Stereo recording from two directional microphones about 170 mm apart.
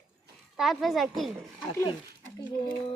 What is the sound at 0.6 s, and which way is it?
Speech, centre (ahead or behind).